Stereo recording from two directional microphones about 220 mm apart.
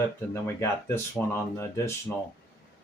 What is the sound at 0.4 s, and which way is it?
Speech, 10° left (ahead or behind).